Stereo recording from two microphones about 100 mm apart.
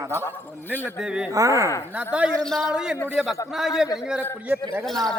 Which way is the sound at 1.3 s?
30° right (ahead or behind).